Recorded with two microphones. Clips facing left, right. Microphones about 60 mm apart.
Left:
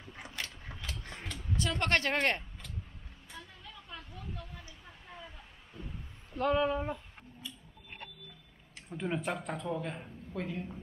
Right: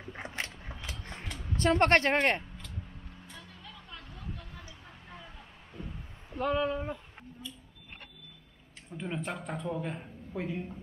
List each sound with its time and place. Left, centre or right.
0.1 s a sound: right
0.7 s a sound: right
1.6 s speech: right
3.3 s vehicle: centre
6.3 s speech: centre
8.9 s speech: centre